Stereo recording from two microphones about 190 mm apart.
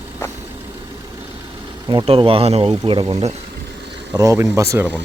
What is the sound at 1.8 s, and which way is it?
A man's voice, 25° right (ahead or behind).